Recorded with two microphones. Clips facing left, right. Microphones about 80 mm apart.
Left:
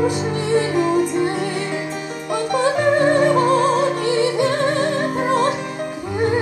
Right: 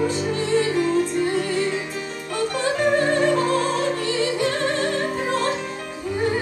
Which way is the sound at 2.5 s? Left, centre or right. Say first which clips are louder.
Left 4 dB; centre.